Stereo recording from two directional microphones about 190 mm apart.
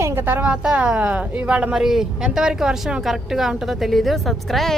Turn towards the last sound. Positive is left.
turn(degrees=0)  # may be behind; listen again after turning